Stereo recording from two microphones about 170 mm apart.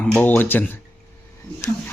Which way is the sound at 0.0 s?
5° left (ahead or behind).